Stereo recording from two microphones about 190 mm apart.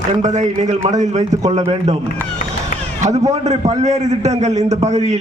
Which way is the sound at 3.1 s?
35° right (ahead or behind).